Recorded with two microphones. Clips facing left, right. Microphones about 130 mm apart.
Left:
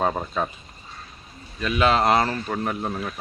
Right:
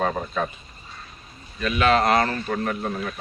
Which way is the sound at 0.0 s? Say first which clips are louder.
Even; 20° left (ahead or behind).